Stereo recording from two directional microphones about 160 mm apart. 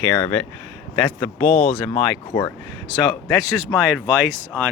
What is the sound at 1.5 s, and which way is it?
Speech, 50° left (ahead or behind).